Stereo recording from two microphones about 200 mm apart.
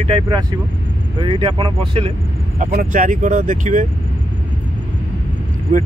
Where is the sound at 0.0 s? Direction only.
30° right (ahead or behind).